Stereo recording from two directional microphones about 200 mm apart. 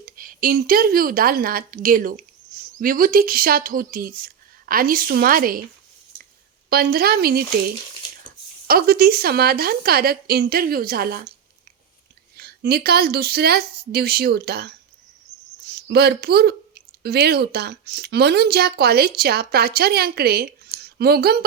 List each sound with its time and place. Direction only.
0.0 s speech: 45° right (ahead or behind)
6.7 s speech: 50° right (ahead or behind)
8.6 s speech: 50° right (ahead or behind)
12.4 s speech: 50° right (ahead or behind)
15.7 s speech: 55° right (ahead or behind)